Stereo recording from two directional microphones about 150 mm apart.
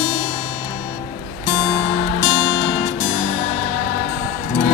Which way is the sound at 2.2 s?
35° left (ahead or behind).